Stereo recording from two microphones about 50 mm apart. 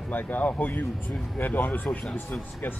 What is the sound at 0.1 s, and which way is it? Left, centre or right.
Speech, left.